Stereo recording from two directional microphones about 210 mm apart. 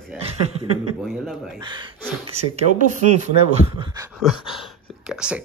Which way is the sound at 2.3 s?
35° right (ahead or behind).